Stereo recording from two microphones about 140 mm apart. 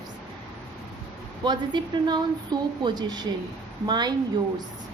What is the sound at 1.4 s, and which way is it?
A woman's voice, 35° right (ahead or behind).